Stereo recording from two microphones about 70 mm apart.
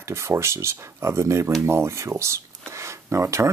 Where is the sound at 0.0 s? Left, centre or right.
Right.